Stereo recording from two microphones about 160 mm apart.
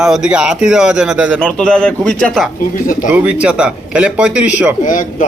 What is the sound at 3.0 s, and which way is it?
A man's voice, 5° right (ahead or behind).